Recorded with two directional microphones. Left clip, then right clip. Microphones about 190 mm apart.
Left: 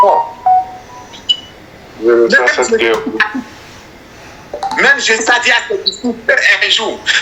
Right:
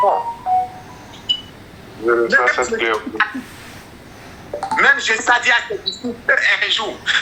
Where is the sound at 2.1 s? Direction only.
20° left (ahead or behind).